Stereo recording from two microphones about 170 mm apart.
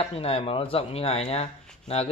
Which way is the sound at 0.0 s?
35° left (ahead or behind).